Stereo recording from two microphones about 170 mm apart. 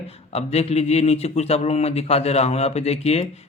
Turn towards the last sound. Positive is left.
turn(degrees=40)  # may be behind; listen again after turning